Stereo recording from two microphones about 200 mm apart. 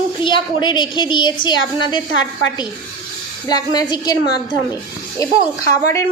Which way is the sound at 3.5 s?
20° left (ahead or behind).